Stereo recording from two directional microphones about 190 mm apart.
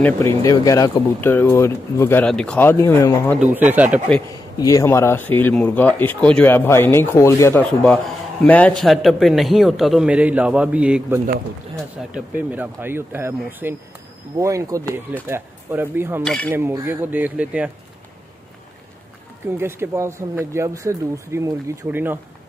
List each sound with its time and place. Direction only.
0.4 s speech: 20° left (ahead or behind)
3.3 s speech: 10° right (ahead or behind)
4.6 s speech: 15° left (ahead or behind); by 17.6 s 5° right (ahead or behind)
19.5 s speech: 15° right (ahead or behind)